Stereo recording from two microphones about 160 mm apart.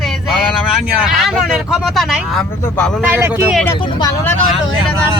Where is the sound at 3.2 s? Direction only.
15° right (ahead or behind).